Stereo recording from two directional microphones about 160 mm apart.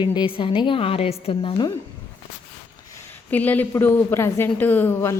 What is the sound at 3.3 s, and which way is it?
A woman's voice, 10° left (ahead or behind).